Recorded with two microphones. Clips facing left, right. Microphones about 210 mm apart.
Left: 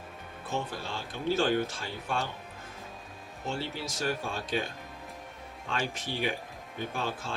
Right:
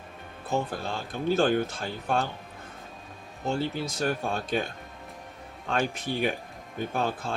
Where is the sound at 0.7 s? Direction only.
50° right (ahead or behind).